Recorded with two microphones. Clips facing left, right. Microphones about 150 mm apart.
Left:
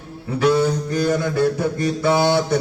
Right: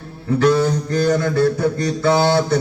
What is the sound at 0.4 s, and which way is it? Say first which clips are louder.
Mantra: even; 10° left (ahead or behind).